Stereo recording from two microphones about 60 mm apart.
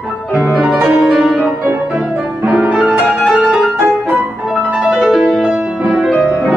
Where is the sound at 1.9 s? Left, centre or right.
Centre.